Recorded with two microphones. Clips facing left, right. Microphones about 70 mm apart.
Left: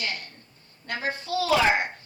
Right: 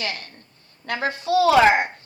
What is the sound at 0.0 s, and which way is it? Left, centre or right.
A woman's voice, right.